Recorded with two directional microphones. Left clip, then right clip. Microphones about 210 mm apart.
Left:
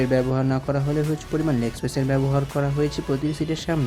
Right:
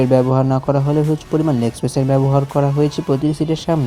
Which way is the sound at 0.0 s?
15° right (ahead or behind).